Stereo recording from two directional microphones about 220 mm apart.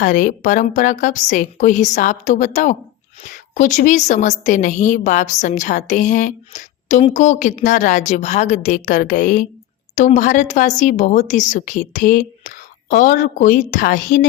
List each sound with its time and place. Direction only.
0.0 s a woman's voice: 35° left (ahead or behind)